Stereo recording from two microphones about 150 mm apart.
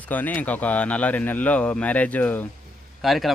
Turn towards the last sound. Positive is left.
turn(degrees=0)  # may be behind; listen again after turning